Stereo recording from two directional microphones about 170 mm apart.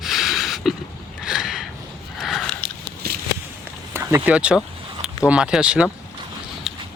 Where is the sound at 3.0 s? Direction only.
70° right (ahead or behind).